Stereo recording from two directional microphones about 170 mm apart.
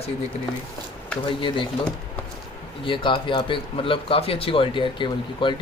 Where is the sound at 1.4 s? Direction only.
30° left (ahead or behind).